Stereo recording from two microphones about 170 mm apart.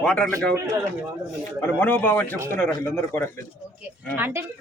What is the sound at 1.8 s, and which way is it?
Speech, 10° left (ahead or behind).